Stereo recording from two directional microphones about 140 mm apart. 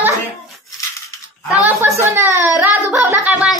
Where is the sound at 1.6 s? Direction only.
15° right (ahead or behind).